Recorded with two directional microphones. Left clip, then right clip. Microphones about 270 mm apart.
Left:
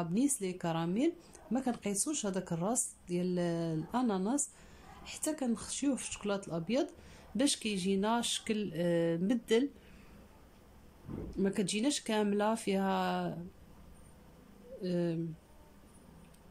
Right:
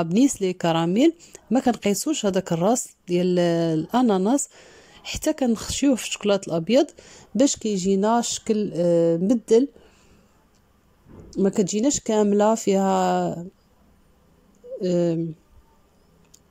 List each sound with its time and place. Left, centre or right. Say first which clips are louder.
0.0 s speech: right 13 dB; right
11.3 s speech: right 12 dB; right
14.8 s speech: right 13 dB; right